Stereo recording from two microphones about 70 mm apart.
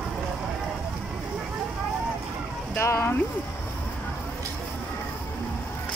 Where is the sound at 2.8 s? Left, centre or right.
Left.